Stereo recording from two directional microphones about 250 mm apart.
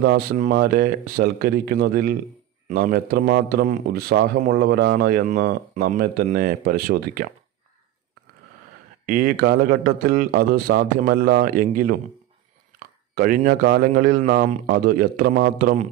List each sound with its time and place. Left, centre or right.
0.0 s speech: right
9.0 s speech: right